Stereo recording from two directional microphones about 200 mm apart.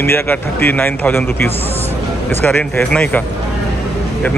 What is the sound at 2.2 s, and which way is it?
A man's voice, 5° left (ahead or behind).